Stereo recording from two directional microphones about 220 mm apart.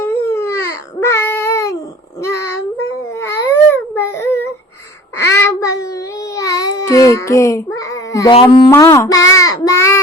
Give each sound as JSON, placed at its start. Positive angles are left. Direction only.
{"t": 0.0, "sound": "baby cry", "side_deg": 10}
{"t": 3.2, "sound": "baby cry", "side_deg": 10}
{"t": 5.1, "sound": "babbling", "side_deg": 10}
{"t": 8.7, "sound": "a sound", "side_deg": 15}
{"t": 9.3, "sound": "child singing", "side_deg": 15}